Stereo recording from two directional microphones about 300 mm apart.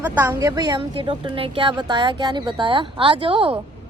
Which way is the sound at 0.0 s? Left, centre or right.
Centre.